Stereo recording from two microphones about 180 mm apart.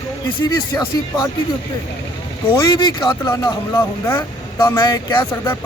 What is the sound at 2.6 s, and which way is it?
Speech, 25° left (ahead or behind).